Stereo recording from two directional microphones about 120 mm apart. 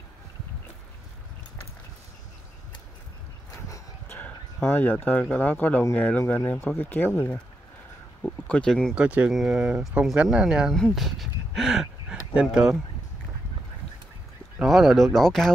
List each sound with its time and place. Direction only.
3.6 s a sound: 30° left (ahead or behind)
4.2 s speech: 15° left (ahead or behind)
8.9 s speech: 10° right (ahead or behind)
10.7 s a sound: centre (ahead or behind)
12.4 s speech: 5° right (ahead or behind)
14.6 s speech: centre (ahead or behind)